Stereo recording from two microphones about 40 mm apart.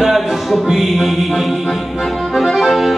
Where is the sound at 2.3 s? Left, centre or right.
Centre.